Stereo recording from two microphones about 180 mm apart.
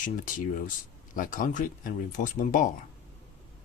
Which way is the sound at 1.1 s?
50° left (ahead or behind).